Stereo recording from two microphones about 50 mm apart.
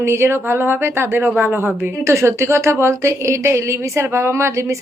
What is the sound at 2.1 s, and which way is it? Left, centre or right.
A woman's voice, right.